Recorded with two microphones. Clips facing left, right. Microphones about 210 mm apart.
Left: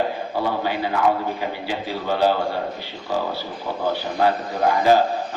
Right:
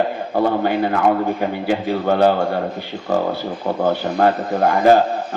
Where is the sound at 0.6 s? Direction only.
55° right (ahead or behind).